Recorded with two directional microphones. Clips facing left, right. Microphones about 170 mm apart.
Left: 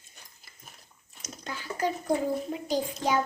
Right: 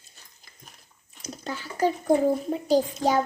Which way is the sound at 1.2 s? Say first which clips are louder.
Right 5 dB; 35° right (ahead or behind).